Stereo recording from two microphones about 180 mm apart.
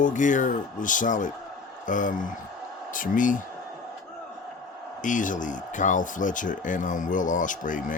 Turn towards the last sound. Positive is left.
turn(degrees=45)  # may be behind; listen again after turning